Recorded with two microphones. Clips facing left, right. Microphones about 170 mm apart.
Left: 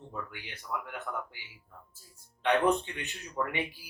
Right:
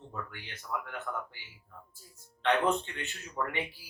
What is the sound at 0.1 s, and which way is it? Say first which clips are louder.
Speech: left 1 dB; 10° left (ahead or behind).